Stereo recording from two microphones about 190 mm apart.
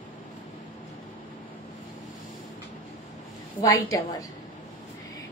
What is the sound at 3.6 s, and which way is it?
Child singing, 15° left (ahead or behind).